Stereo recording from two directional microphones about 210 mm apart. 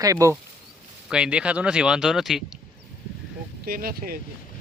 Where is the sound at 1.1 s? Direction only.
5° right (ahead or behind).